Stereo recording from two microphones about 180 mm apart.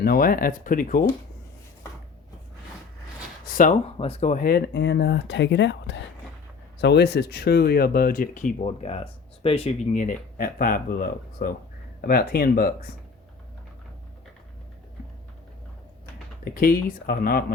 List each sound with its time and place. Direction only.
0.0 s speech: 55° left (ahead or behind)
3.4 s speech: 50° left (ahead or behind)
3.9 s speech: 30° left (ahead or behind)
4.4 s speech: 60° left (ahead or behind); by 6.0 s 80° left
6.8 s speech: 70° left (ahead or behind); by 10.0 s 30° left (ahead or behind)
10.0 s speech: 50° left (ahead or behind)
16.4 s speech: 55° left (ahead or behind)